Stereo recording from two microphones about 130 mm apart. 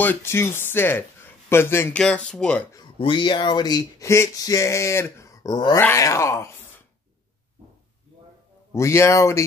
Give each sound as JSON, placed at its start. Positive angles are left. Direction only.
{"t": 0.0, "sound": "speech", "side_deg": 15}
{"t": 2.0, "sound": "speech", "side_deg": 5}
{"t": 3.0, "sound": "speech", "side_deg": 35}
{"t": 5.8, "sound": "speech", "side_deg": 20}
{"t": 8.7, "sound": "speech", "side_deg": 20}